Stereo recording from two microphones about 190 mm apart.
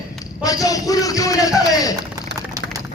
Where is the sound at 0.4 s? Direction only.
20° left (ahead or behind).